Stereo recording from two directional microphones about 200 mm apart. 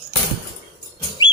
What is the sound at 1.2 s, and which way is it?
Bird, 25° left (ahead or behind).